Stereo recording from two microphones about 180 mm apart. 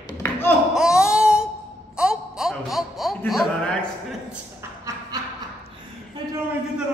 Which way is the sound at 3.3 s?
Centre (ahead or behind).